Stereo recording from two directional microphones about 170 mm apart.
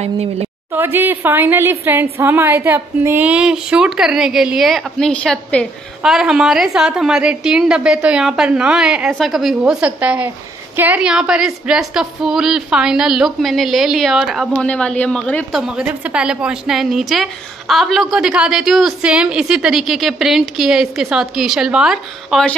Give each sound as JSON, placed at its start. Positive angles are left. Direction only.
{"t": 0.0, "sound": "a woman's voice", "side_deg": -35}
{"t": 0.7, "sound": "a woman's voice", "side_deg": -10}
{"t": 15.6, "sound": "a woman's voice", "side_deg": -5}